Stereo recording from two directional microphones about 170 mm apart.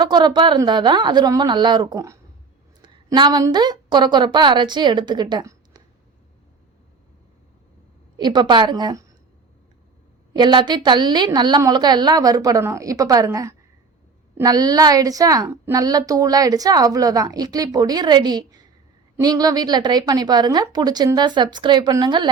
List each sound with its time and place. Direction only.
0.0 s a woman's voice: 25° right (ahead or behind)
8.2 s a woman's voice: 25° right (ahead or behind)
10.3 s a woman's voice: 25° right (ahead or behind)